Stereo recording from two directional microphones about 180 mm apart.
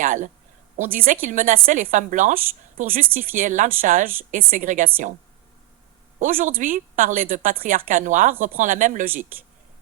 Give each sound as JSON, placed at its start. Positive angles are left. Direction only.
{"t": 0.0, "sound": "a woman's voice", "side_deg": -45}
{"t": 6.1, "sound": "a woman's voice", "side_deg": -45}